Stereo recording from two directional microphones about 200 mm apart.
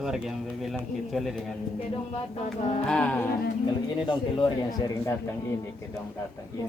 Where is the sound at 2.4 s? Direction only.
35° left (ahead or behind).